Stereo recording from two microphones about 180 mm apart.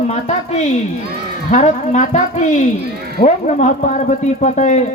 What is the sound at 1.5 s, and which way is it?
Speech, 45° left (ahead or behind).